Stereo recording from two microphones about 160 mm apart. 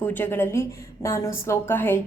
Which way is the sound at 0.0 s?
10° left (ahead or behind).